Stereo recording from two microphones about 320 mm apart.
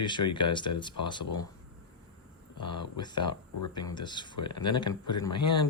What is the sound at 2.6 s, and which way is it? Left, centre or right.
Speech, centre.